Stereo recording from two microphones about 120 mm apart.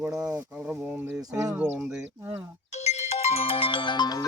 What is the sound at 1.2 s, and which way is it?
Speech, 30° right (ahead or behind).